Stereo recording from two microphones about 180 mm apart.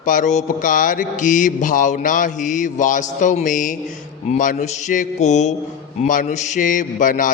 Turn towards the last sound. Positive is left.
turn(degrees=50)  # may be behind; listen again after turning